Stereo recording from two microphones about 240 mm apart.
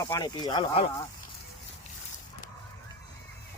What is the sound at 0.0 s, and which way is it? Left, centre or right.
Speech, centre.